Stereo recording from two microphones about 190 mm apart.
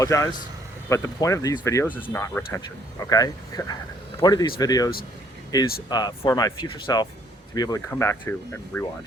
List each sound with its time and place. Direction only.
0.0 s speech: 15° left (ahead or behind)